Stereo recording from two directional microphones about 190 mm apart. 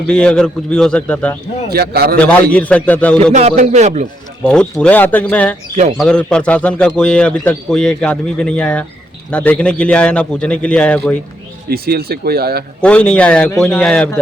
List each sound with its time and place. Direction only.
0.1 s a man's voice: 5° left (ahead or behind)
1.7 s a man's voice: 55° right (ahead or behind)
2.1 s a man's voice: 5° left (ahead or behind)
3.3 s a man's voice: 35° right (ahead or behind)
4.4 s a man's voice: 5° left (ahead or behind)
11.7 s speech: 55° right (ahead or behind)
12.8 s a man's voice: 5° left (ahead or behind)